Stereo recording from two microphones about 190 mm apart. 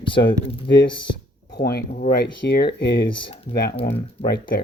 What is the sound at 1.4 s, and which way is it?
Speech, 60° left (ahead or behind).